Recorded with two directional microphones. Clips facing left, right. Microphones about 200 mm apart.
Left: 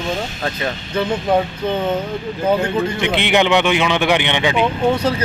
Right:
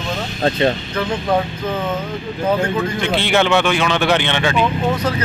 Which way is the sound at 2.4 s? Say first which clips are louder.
Left 1 dB; 15° left (ahead or behind).